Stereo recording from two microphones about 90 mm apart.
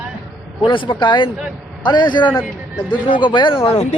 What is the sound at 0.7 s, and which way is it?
Speech, 60° left (ahead or behind).